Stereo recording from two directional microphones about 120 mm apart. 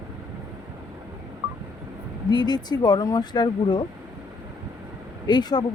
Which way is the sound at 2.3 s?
35° left (ahead or behind).